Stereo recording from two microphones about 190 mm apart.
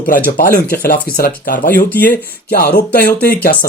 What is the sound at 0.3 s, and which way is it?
Speech, 50° left (ahead or behind).